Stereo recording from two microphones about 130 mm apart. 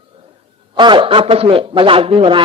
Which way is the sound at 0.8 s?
35° right (ahead or behind).